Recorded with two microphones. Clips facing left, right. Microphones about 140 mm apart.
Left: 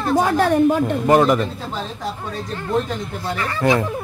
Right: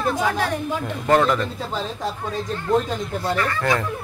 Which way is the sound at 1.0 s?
15° left (ahead or behind).